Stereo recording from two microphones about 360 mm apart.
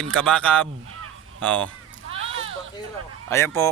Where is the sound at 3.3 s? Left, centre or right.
Centre.